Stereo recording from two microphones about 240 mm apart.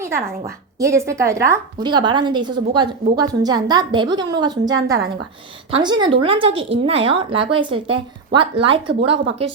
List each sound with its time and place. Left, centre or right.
0.0 s a woman's voice: centre
5.7 s a woman's voice: centre